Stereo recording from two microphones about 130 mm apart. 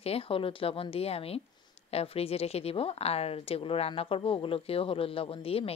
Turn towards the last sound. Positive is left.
turn(degrees=50)  # may be behind; listen again after turning